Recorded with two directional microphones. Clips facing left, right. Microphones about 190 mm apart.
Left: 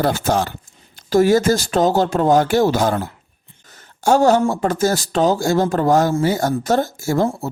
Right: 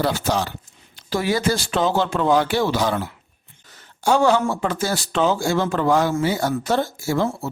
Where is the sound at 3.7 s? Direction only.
45° left (ahead or behind).